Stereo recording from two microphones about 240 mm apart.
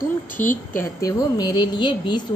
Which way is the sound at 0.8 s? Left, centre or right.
Centre.